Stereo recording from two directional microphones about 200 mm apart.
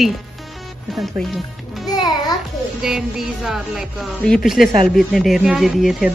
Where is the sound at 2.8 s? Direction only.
5° right (ahead or behind).